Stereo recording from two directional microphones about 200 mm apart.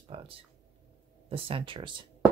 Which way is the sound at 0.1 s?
25° right (ahead or behind).